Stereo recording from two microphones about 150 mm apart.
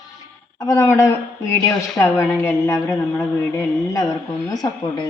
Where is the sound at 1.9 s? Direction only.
15° left (ahead or behind).